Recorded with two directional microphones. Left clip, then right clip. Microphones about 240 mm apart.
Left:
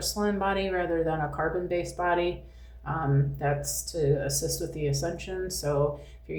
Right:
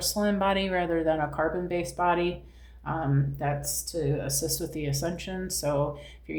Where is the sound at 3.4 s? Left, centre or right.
Right.